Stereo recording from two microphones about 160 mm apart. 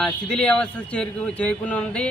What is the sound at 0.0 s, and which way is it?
A man's voice, 5° left (ahead or behind).